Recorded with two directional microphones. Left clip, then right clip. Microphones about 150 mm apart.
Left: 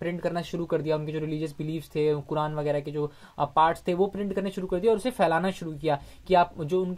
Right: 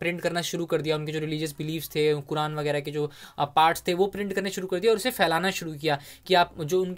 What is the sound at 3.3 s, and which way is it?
Speech, 45° right (ahead or behind).